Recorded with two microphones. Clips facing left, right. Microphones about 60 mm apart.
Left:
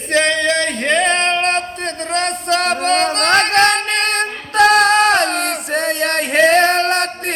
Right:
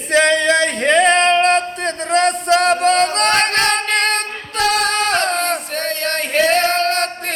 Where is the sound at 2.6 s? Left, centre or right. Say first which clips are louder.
Right 1 dB; left.